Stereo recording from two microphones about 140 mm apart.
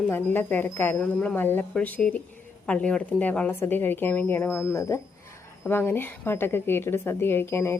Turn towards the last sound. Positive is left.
turn(degrees=20)  # may be behind; listen again after turning